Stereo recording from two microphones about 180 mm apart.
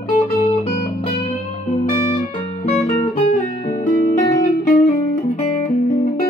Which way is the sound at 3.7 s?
50° left (ahead or behind).